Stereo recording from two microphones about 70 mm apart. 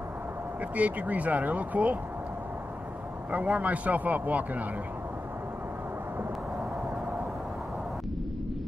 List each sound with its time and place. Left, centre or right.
0.7 s a man's voice: right
3.3 s a man's voice: centre